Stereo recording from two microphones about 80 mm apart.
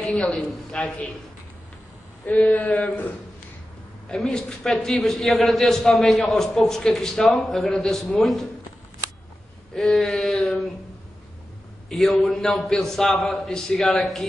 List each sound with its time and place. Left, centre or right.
0.0 s a man's voice: centre
2.2 s a man's voice: centre
4.1 s a man's voice: centre
9.8 s a man's voice: centre
11.9 s a man's voice: centre